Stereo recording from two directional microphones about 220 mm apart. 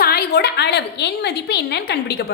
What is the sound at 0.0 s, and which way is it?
A woman's voice, 45° left (ahead or behind).